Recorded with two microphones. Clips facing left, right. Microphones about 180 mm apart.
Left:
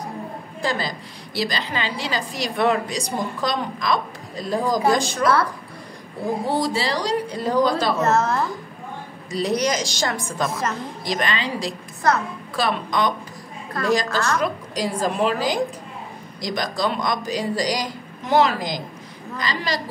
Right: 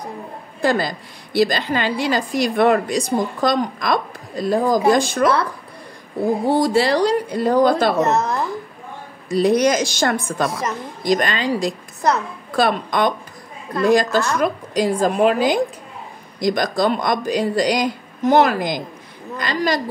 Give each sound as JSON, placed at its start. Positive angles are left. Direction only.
{"t": 0.6, "sound": "a woman's voice", "side_deg": -55}
{"t": 6.5, "sound": "a woman's voice", "side_deg": -55}
{"t": 8.0, "sound": "a woman's voice", "side_deg": -15}
{"t": 9.3, "sound": "a woman's voice", "side_deg": -55}
{"t": 11.1, "sound": "a woman's voice", "side_deg": -45}